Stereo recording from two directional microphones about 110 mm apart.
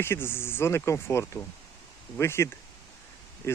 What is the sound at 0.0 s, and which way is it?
Speech, 20° left (ahead or behind).